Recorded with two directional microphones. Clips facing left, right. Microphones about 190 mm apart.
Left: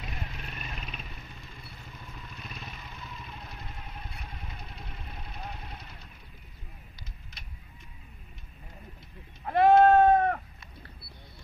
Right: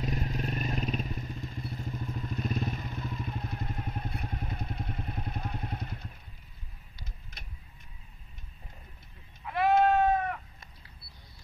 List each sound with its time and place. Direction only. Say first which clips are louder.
0.0 s vehicle: right 8 dB; 40° right (ahead or behind)
9.4 s goat: left 5 dB; 50° left (ahead or behind)